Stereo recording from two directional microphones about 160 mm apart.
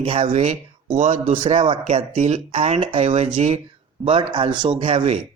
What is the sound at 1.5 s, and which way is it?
A man's voice, 35° right (ahead or behind).